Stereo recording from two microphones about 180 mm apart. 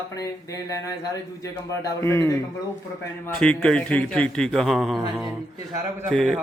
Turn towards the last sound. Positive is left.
turn(degrees=0)  # may be behind; listen again after turning